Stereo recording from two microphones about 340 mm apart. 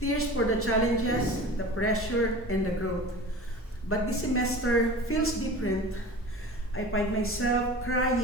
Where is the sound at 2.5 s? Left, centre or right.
Left.